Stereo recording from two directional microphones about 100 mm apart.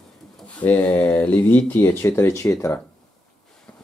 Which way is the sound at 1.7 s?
25° left (ahead or behind).